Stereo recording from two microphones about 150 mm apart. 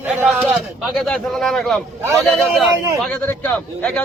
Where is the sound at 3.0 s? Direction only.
10° left (ahead or behind).